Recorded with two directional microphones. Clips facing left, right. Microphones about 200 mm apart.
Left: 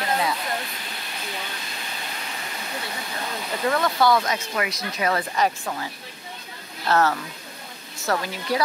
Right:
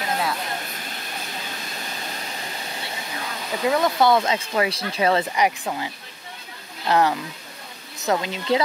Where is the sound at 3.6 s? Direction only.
20° right (ahead or behind).